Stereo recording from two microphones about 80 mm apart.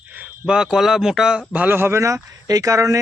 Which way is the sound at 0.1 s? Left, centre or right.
Centre.